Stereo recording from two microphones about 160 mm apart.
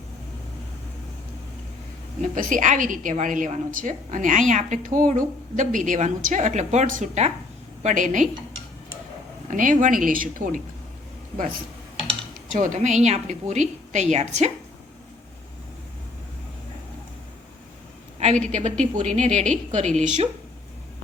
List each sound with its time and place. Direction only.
2.2 s a woman's voice: 55° right (ahead or behind)
9.5 s speech: 55° right (ahead or behind)
12.5 s a woman's voice: 50° right (ahead or behind)
18.2 s a sound: 45° right (ahead or behind)
18.5 s a woman's voice: 50° right (ahead or behind)